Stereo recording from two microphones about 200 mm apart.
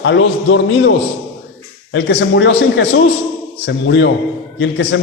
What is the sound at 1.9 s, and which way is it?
A man's voice, 65° left (ahead or behind).